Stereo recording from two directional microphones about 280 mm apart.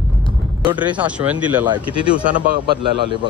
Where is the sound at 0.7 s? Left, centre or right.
Centre.